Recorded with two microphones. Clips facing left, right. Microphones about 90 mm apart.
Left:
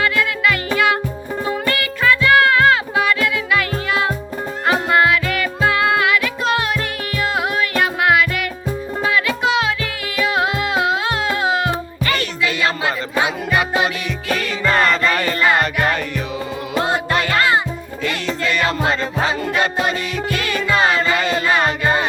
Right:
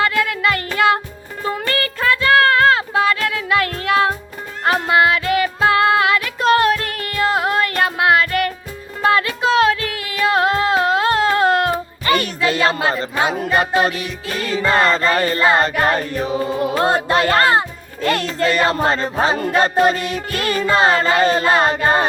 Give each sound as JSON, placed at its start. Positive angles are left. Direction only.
{"t": 0.0, "sound": "music", "side_deg": -35}
{"t": 5.1, "sound": "music", "side_deg": -40}
{"t": 9.6, "sound": "music", "side_deg": -45}